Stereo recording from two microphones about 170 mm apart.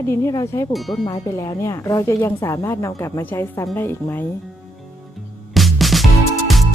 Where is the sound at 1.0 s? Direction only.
25° left (ahead or behind).